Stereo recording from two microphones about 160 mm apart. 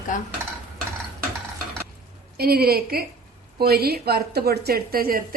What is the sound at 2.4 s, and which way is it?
A woman's voice, 75° right (ahead or behind).